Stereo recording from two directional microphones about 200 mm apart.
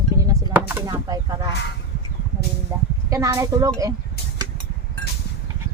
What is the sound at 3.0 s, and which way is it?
Speech, 15° right (ahead or behind).